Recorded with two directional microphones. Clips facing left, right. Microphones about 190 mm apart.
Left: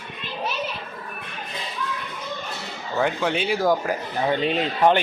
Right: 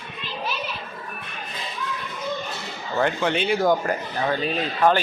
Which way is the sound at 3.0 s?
5° left (ahead or behind).